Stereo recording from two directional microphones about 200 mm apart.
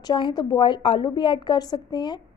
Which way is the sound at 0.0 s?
20° left (ahead or behind).